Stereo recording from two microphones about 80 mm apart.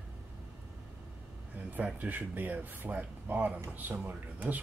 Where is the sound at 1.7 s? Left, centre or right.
Centre.